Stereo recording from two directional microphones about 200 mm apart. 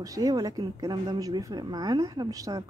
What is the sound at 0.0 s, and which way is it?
A woman's voice, 15° right (ahead or behind).